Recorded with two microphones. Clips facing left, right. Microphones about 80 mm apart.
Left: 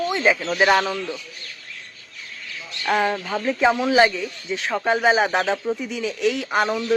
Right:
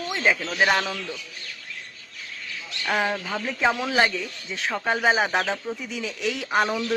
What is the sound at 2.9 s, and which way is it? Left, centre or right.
Speech, centre.